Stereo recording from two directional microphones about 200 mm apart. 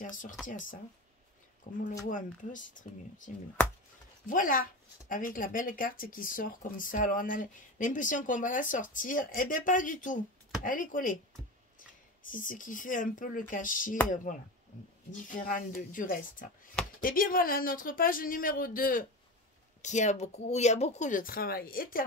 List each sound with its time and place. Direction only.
0.1 s speech: 40° left (ahead or behind)
12.3 s speech: 40° left (ahead or behind)
15.0 s speech: 40° left (ahead or behind)